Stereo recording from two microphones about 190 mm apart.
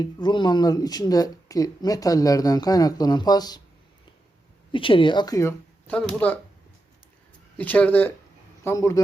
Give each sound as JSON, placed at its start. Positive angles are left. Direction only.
{"t": 0.0, "sound": "speech", "side_deg": 25}
{"t": 4.7, "sound": "speech", "side_deg": 25}
{"t": 7.6, "sound": "speech", "side_deg": 10}